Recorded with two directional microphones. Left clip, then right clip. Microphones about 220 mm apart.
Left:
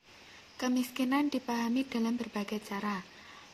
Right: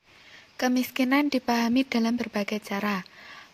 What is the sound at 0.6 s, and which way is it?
Speech, 35° right (ahead or behind).